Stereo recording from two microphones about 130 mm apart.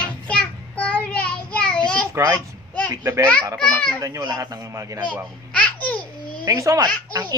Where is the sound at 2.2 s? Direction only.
20° right (ahead or behind).